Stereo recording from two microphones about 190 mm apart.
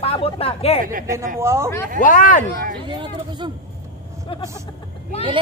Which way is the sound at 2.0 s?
45° left (ahead or behind).